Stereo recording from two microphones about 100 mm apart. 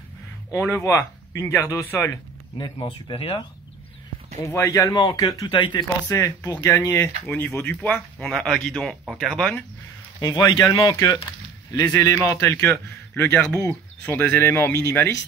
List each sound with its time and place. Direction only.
0.5 s a man's voice: 30° left (ahead or behind)
2.9 s speech: 60° left (ahead or behind)
4.4 s speech: 30° left (ahead or behind)
4.9 s speech: 50° left (ahead or behind)
6.0 s a man's voice: 30° left (ahead or behind); by 9.5 s centre (ahead or behind)
10.2 s a man's voice: 35° left (ahead or behind)